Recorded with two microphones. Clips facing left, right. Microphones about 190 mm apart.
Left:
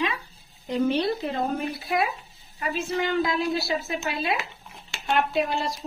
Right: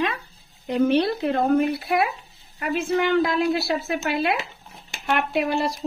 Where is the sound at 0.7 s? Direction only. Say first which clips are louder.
Right 4 dB; 65° right (ahead or behind).